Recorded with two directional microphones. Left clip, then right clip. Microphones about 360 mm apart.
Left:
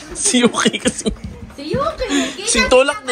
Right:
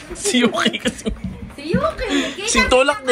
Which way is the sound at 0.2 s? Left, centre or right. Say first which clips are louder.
Left 2 dB; centre.